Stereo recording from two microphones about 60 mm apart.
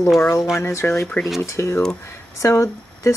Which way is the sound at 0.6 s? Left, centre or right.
Left.